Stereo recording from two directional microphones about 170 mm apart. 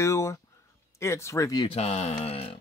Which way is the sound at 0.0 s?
15° left (ahead or behind).